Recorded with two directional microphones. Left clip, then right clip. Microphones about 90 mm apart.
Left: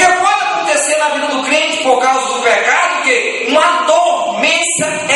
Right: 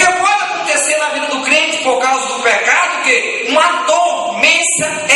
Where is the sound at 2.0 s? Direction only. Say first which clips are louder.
Left 2 dB; 20° right (ahead or behind).